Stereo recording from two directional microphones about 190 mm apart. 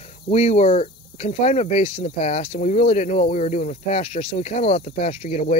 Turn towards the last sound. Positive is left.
turn(degrees=40)  # may be behind; listen again after turning